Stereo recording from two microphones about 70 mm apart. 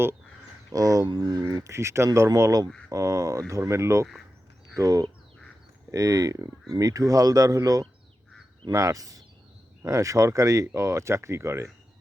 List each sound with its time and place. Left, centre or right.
0.7 s speech: right
1.1 s speech: right
1.5 s speech: right
4.8 s speech: right